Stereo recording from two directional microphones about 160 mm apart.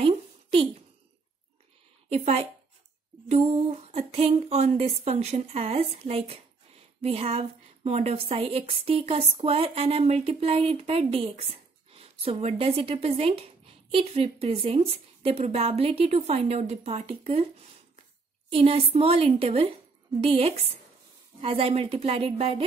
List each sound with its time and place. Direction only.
0.0 s a sound: 35° right (ahead or behind)
2.0 s a woman's voice: 40° right (ahead or behind)
18.5 s a woman's voice: 35° right (ahead or behind)